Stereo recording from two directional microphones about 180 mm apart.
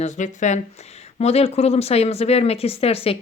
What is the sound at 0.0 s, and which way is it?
Speech, 40° left (ahead or behind).